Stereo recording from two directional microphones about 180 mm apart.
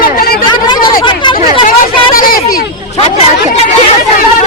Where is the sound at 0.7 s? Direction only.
25° left (ahead or behind).